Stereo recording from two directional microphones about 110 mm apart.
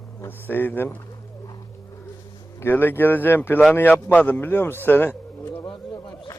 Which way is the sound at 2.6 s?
20° left (ahead or behind).